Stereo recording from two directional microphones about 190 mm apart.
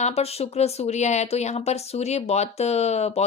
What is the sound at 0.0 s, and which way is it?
Speech, 35° left (ahead or behind).